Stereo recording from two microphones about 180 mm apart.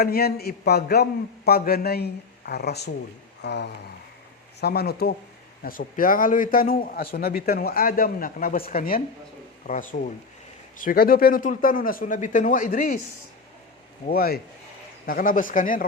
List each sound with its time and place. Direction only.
0.0 s a man's voice: 60° left (ahead or behind)
5.6 s a man's voice: 50° left (ahead or behind)
14.1 s a man's voice: 60° left (ahead or behind)